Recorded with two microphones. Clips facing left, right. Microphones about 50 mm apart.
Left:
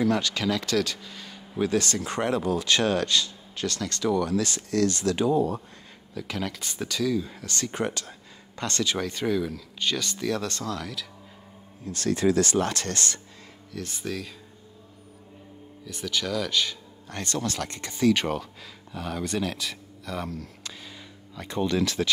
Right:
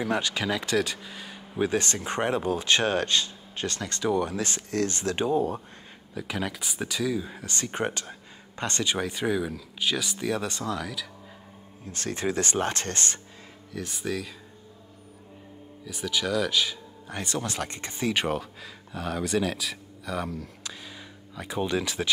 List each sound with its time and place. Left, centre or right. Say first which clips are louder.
0.0 s speech: left 3 dB; right
6.1 s speech: even; centre
11.8 s speech: left 6 dB; right
13.7 s speech: right 1 dB; centre
15.8 s speech: right 1 dB; centre; by 18.1 s right
18.1 s speech: even; centre